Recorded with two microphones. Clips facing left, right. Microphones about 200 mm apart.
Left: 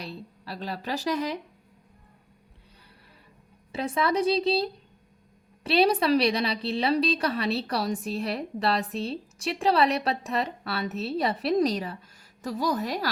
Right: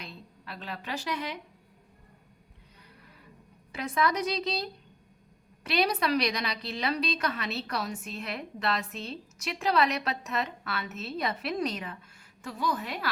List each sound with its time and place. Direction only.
0.0 s speech: 35° left (ahead or behind)
3.7 s a woman's voice: 30° left (ahead or behind)